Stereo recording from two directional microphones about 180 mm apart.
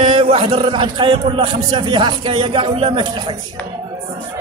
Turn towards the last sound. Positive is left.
turn(degrees=-30)  # may be behind; listen again after turning